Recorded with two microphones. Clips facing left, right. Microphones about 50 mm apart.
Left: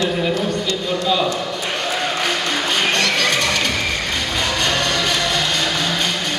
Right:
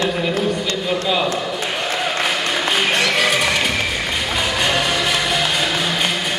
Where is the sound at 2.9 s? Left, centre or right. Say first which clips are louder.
Right 1 dB; centre.